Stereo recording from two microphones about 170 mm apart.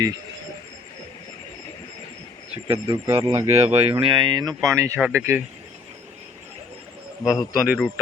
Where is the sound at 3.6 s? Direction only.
35° right (ahead or behind); by 5.4 s 15° right (ahead or behind).